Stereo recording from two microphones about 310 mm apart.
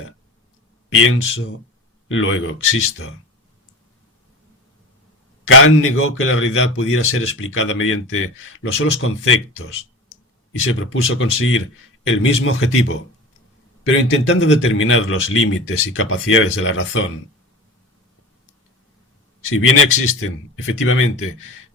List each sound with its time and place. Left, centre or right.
1.0 s a man's voice: left
5.5 s a man's voice: left
19.5 s a man's voice: left